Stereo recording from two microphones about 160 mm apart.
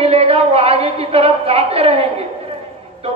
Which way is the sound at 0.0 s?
40° right (ahead or behind).